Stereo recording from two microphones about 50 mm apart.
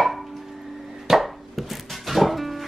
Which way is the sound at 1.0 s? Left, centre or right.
Centre.